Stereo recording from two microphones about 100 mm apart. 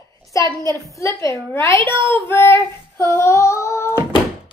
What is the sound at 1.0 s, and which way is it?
Speech, 30° left (ahead or behind).